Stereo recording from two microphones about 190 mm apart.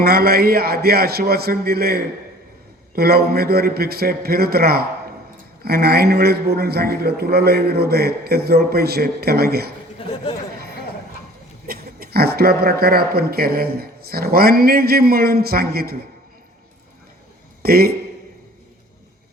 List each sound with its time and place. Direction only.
0.0 s a man's voice: 55° right (ahead or behind)
10.0 s speech: 30° left (ahead or behind)
11.7 s a man's voice: 50° right (ahead or behind)
17.6 s a man's voice: 55° right (ahead or behind)